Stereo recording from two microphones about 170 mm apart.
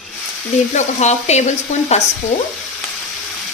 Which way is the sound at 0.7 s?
45° left (ahead or behind).